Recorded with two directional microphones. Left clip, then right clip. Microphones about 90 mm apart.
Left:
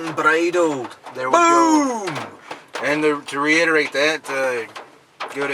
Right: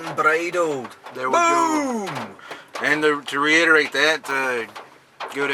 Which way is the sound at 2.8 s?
20° right (ahead or behind).